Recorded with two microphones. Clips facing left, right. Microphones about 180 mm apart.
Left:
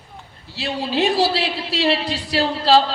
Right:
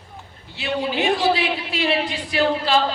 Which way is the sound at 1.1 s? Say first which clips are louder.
Left 1 dB; 75° left (ahead or behind).